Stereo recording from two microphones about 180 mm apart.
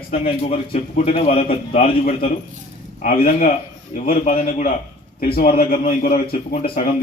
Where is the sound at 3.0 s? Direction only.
50° left (ahead or behind).